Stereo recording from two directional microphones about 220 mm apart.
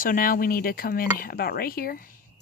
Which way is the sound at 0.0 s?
40° left (ahead or behind).